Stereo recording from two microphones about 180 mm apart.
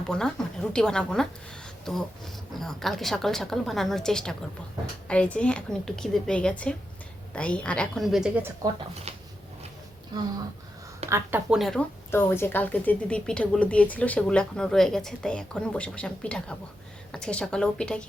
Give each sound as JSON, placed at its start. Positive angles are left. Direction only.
{"t": 0.1, "sound": "speech", "side_deg": 5}
{"t": 9.1, "sound": "a sound", "side_deg": -35}
{"t": 10.1, "sound": "speech", "side_deg": -25}
{"t": 11.1, "sound": "speech", "side_deg": -10}
{"t": 12.1, "sound": "speech", "side_deg": 15}